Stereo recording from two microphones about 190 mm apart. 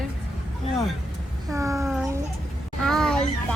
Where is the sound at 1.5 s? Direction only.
15° right (ahead or behind).